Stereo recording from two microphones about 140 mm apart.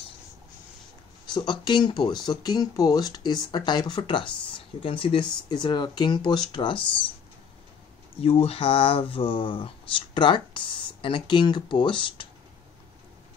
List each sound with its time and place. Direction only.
1.3 s speech: 30° left (ahead or behind)
8.2 s speech: 45° left (ahead or behind)